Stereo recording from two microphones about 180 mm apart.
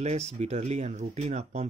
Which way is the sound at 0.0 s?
35° right (ahead or behind).